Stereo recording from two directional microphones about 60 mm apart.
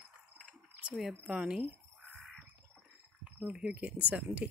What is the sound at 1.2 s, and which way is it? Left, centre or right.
Speech, centre.